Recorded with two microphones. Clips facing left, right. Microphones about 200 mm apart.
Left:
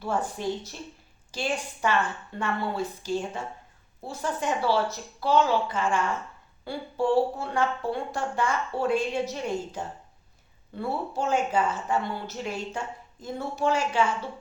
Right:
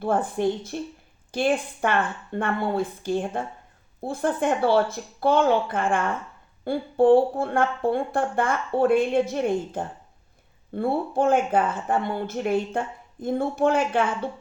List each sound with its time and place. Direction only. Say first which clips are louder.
0.0 s speech: right 6 dB; 55° right (ahead or behind)